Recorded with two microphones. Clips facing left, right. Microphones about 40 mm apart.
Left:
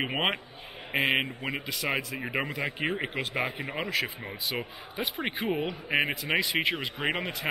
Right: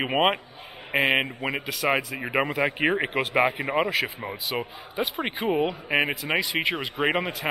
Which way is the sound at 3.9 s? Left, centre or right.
Centre.